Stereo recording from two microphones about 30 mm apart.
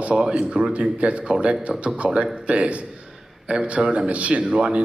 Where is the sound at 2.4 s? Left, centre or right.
Right.